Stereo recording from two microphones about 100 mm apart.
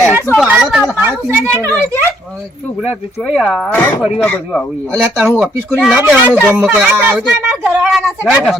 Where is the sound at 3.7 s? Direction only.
20° left (ahead or behind).